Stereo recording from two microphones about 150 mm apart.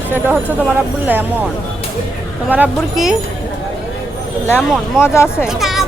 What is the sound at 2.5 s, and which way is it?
Speech, 5° right (ahead or behind).